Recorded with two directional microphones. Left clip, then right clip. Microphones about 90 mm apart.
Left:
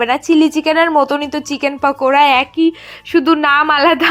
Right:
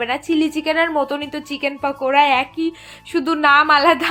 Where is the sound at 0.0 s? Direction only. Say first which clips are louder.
Left 7 dB; 45° left (ahead or behind).